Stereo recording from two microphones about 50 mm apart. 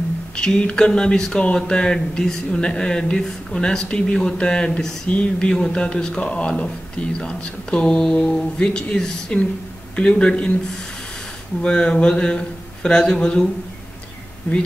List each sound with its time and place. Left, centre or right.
0.4 s speech: centre
11.6 s speech: centre